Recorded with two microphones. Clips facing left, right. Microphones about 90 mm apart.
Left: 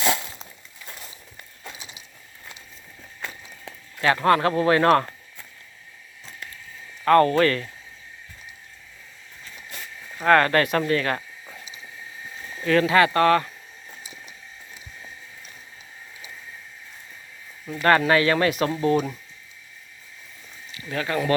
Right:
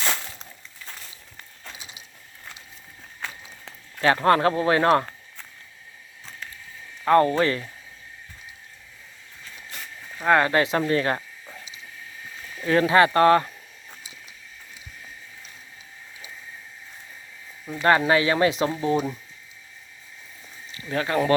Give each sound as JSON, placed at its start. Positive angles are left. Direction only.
{"t": 4.0, "sound": "speech", "side_deg": -30}
{"t": 7.0, "sound": "speech", "side_deg": -15}
{"t": 10.2, "sound": "speech", "side_deg": -15}
{"t": 12.6, "sound": "speech", "side_deg": -25}
{"t": 17.7, "sound": "speech", "side_deg": -20}
{"t": 20.9, "sound": "speech", "side_deg": -30}